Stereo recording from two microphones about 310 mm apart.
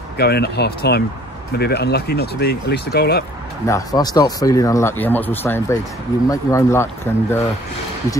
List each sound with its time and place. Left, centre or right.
0.2 s speech: left
3.6 s speech: centre